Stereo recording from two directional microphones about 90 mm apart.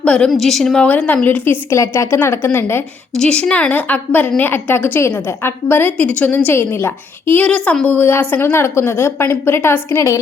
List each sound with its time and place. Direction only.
0.0 s a woman's voice: 10° left (ahead or behind)
1.7 s a woman's voice: 35° left (ahead or behind)
3.2 s a woman's voice: 10° left (ahead or behind); by 10.2 s 30° left (ahead or behind)